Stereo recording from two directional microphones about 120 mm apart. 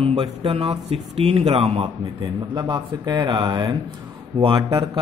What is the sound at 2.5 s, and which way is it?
A man's voice, 35° right (ahead or behind).